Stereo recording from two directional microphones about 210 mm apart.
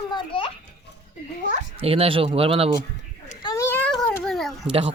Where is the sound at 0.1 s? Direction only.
25° left (ahead or behind).